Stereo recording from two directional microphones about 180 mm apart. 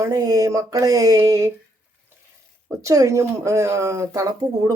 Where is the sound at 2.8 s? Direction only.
15° right (ahead or behind).